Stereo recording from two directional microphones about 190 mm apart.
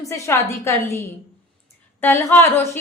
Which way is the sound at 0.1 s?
15° left (ahead or behind).